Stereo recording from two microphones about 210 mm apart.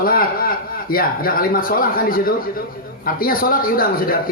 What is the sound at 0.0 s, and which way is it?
A man's voice, 45° left (ahead or behind).